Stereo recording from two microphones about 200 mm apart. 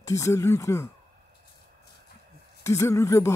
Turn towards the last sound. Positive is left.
turn(degrees=15)  # may be behind; listen again after turning